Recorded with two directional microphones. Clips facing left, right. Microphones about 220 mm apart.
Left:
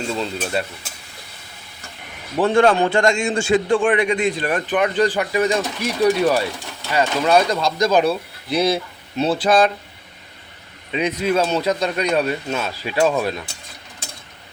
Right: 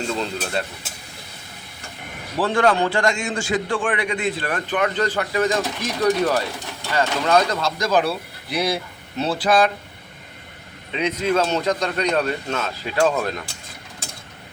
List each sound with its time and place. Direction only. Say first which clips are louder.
0.1 s speech: left 1 dB; 5° left (ahead or behind)
2.4 s a man's voice: left 4 dB; 25° left (ahead or behind)
10.9 s speech: left 1 dB; 10° left (ahead or behind)